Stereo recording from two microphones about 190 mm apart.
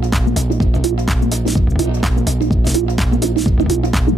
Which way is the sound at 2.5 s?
Centre (ahead or behind).